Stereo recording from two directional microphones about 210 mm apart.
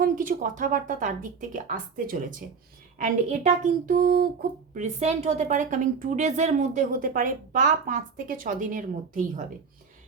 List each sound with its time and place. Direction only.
0.0 s a woman's voice: 40° right (ahead or behind)
4.7 s a woman's voice: 35° right (ahead or behind)